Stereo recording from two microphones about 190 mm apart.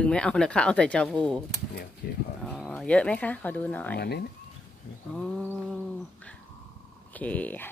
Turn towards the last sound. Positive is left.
turn(degrees=10)  # may be behind; listen again after turning